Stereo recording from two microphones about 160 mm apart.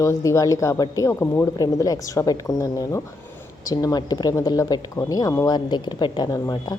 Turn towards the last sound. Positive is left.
turn(degrees=25)  # may be behind; listen again after turning